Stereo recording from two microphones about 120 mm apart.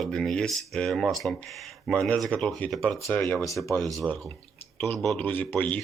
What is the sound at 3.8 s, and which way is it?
Speech, 30° right (ahead or behind).